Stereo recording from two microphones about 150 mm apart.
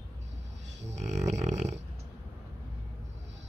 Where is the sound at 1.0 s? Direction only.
50° right (ahead or behind).